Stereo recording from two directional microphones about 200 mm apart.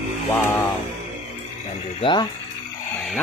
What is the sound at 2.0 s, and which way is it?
Speech, 20° left (ahead or behind).